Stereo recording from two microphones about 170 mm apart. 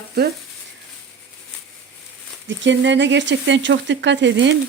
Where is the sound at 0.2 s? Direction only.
70° right (ahead or behind).